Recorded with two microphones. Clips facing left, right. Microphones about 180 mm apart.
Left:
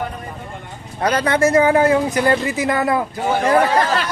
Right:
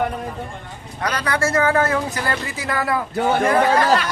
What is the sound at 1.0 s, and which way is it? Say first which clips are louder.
Speech: left 6 dB; 25° left (ahead or behind).